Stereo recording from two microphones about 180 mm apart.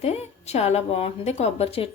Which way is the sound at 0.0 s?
35° left (ahead or behind).